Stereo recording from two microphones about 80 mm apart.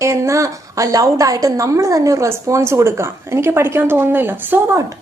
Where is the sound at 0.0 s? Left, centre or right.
Right.